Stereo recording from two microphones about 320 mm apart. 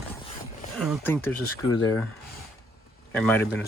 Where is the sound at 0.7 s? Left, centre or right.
Centre.